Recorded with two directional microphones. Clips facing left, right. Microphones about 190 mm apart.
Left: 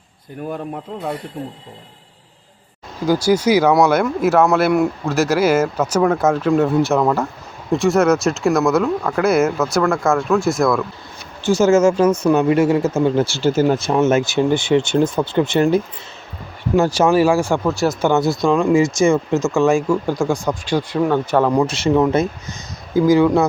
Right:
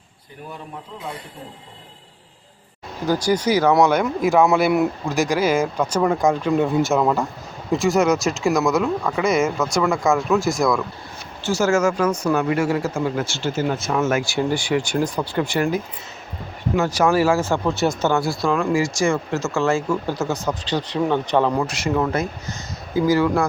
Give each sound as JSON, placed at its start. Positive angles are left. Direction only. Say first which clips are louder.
{"t": 3.1, "sound": "speech", "louder": "left 4 dB", "side_deg": 10}
{"t": 11.4, "sound": "speech", "louder": "left 6 dB", "side_deg": 20}
{"t": 17.7, "sound": "speech", "louder": "left 1 dB", "side_deg": 0}
{"t": 18.0, "sound": "speech", "louder": "left 4 dB", "side_deg": 20}
{"t": 21.6, "sound": "speech", "louder": "left 6 dB", "side_deg": 25}